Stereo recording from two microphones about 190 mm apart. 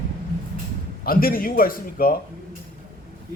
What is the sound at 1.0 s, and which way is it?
A man's voice, 50° left (ahead or behind).